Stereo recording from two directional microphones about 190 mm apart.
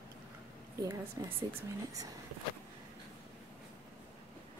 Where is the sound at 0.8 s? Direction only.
15° right (ahead or behind).